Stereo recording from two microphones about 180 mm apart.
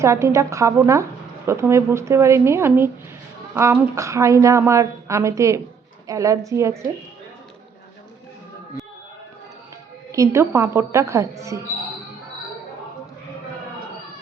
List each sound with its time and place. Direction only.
0.0 s a woman's voice: 15° right (ahead or behind)
10.1 s a woman's voice: 15° right (ahead or behind)